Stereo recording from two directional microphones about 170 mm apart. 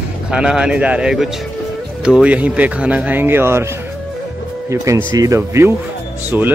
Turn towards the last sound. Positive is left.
turn(degrees=-10)  # may be behind; listen again after turning